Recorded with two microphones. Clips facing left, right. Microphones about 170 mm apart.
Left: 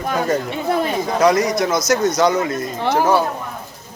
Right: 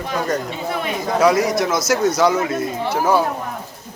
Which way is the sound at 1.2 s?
5° right (ahead or behind).